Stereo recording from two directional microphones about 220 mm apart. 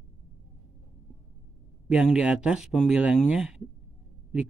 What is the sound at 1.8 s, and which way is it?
Speech, 5° right (ahead or behind).